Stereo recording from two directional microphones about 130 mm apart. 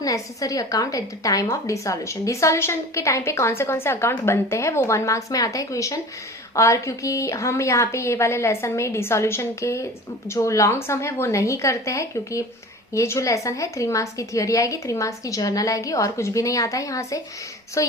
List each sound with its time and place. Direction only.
0.0 s a woman's voice: 25° left (ahead or behind)